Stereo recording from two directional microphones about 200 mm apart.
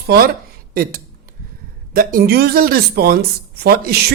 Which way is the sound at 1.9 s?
45° right (ahead or behind).